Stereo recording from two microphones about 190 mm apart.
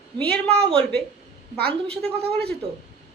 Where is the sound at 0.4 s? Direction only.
5° left (ahead or behind).